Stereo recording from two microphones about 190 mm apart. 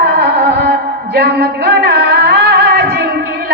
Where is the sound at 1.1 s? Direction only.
60° right (ahead or behind).